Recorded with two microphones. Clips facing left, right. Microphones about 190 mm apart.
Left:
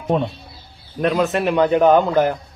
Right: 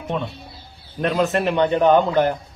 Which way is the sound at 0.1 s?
40° left (ahead or behind).